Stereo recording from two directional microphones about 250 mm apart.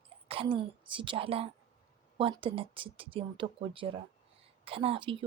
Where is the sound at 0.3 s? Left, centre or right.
Right.